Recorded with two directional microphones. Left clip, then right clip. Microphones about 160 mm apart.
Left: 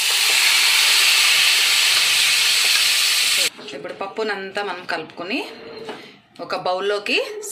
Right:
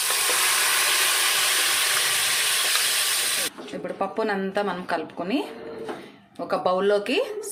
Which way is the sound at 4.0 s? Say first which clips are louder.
Left 1 dB; 40° right (ahead or behind).